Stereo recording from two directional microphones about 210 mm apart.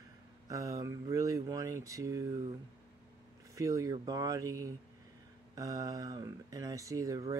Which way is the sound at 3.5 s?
15° right (ahead or behind).